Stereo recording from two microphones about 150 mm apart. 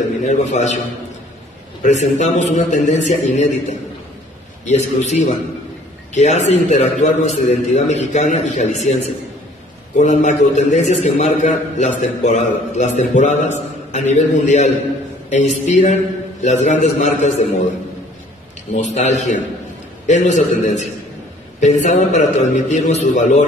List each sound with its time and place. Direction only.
0.2 s a man's voice: 50° left (ahead or behind)
1.8 s a man's voice: 50° left (ahead or behind)
18.9 s a man's voice: 50° left (ahead or behind)